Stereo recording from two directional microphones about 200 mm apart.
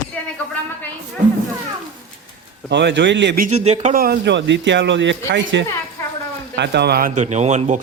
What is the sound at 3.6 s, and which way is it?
A man's voice, 35° right (ahead or behind).